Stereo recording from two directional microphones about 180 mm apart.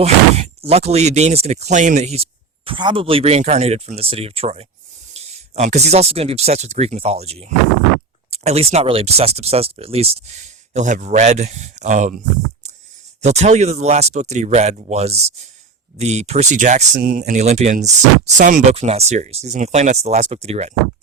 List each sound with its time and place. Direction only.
0.0 s speech: 35° right (ahead or behind)
2.6 s speech: 25° right (ahead or behind)
13.2 s speech: 40° right (ahead or behind)